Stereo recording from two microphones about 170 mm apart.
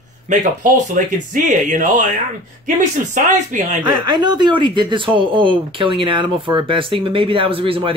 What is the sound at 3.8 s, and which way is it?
Speech, 25° right (ahead or behind).